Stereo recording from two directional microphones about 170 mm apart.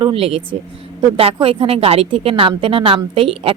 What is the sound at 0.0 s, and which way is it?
Speech, 35° right (ahead or behind).